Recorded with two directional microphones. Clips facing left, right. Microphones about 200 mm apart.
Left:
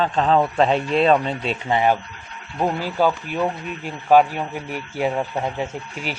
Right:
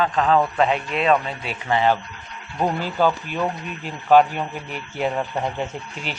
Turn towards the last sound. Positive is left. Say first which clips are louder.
# left 2 dB
turn(degrees=5)  # may be behind; listen again after turning